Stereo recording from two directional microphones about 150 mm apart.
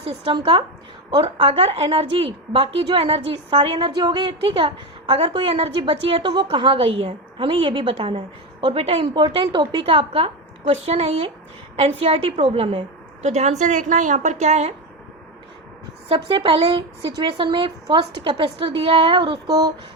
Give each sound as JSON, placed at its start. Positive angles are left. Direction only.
{"t": 0.0, "sound": "a woman's voice", "side_deg": -40}
{"t": 16.0, "sound": "a woman's voice", "side_deg": -35}